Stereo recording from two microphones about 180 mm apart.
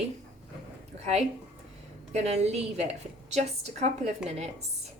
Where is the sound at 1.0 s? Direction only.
35° right (ahead or behind).